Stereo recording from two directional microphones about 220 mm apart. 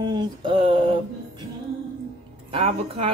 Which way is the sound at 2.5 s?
25° right (ahead or behind).